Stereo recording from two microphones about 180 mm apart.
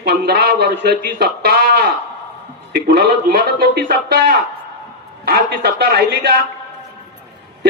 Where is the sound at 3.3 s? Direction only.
55° right (ahead or behind).